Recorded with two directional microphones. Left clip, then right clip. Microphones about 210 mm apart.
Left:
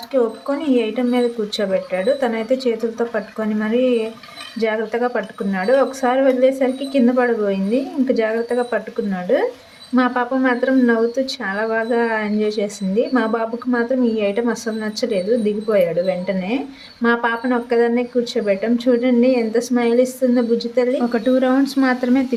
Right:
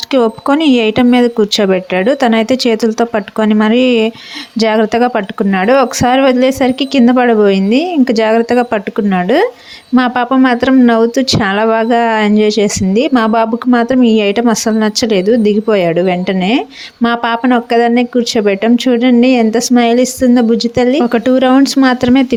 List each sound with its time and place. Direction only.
0.1 s speech: 40° right (ahead or behind)